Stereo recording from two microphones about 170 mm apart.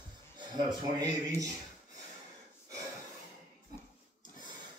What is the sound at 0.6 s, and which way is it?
Speech, 25° right (ahead or behind).